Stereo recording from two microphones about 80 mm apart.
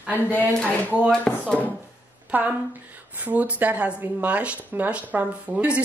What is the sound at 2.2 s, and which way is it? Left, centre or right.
A woman's voice, centre.